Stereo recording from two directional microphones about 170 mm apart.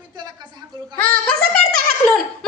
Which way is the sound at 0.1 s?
25° right (ahead or behind).